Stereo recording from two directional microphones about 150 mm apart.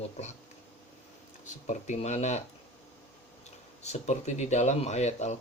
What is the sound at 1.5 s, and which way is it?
Speech, 55° left (ahead or behind).